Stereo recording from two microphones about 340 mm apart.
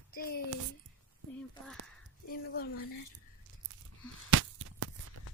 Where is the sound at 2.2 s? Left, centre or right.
Left.